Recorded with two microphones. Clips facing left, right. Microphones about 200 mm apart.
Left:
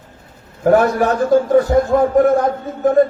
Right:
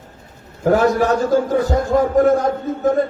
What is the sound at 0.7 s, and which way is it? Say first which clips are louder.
A man's voice: left 1 dB; 55° left (ahead or behind).